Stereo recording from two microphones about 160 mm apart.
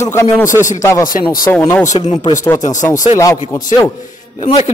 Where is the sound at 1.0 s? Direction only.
60° left (ahead or behind).